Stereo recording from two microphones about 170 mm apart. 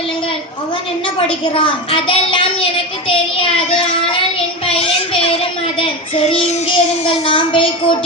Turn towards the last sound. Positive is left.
turn(degrees=30)  # may be behind; listen again after turning